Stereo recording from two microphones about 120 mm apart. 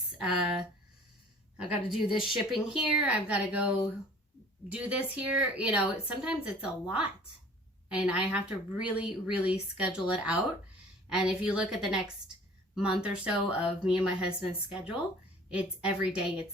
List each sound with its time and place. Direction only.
0.2 s a woman's voice: 5° right (ahead or behind)
7.9 s a woman's voice: 10° right (ahead or behind)